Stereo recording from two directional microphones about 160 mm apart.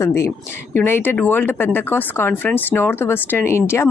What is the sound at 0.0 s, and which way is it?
Speech, 15° left (ahead or behind).